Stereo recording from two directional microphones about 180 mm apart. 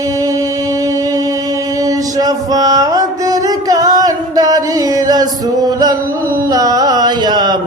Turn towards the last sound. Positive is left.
turn(degrees=-25)  # may be behind; listen again after turning